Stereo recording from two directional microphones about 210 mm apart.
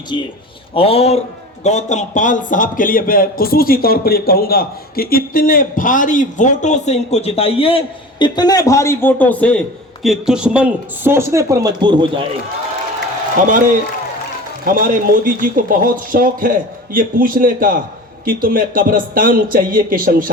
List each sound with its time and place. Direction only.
0.1 s a man's voice: 25° left (ahead or behind); by 12.2 s 20° right (ahead or behind)
13.3 s speech: 40° right (ahead or behind)